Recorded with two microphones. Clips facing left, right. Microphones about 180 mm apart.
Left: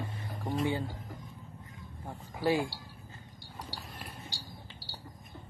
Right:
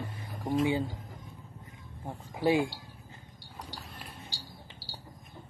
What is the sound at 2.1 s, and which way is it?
Speech, 20° right (ahead or behind).